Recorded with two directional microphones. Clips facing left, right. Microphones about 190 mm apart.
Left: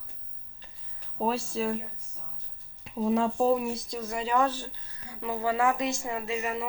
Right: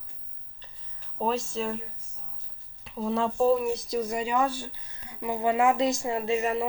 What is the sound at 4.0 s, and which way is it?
Speech, 15° right (ahead or behind).